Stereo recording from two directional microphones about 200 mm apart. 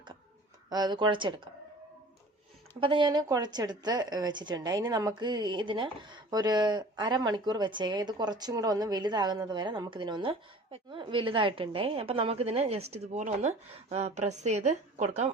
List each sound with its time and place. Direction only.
0.7 s a woman's voice: 20° right (ahead or behind)
2.8 s a woman's voice: 25° right (ahead or behind)